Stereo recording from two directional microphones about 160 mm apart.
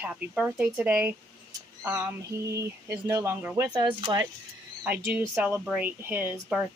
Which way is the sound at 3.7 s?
25° right (ahead or behind).